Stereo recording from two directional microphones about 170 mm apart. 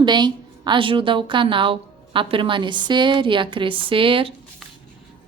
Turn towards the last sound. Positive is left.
turn(degrees=-30)  # may be behind; listen again after turning